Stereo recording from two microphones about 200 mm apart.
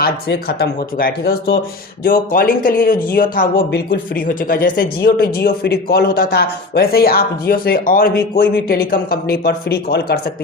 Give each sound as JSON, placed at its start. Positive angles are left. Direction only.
{"t": 0.0, "sound": "a man's voice", "side_deg": 50}